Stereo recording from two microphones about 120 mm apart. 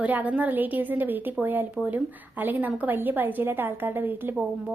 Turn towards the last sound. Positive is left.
turn(degrees=-10)  # may be behind; listen again after turning